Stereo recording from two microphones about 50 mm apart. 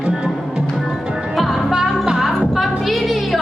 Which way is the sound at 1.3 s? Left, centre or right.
Centre.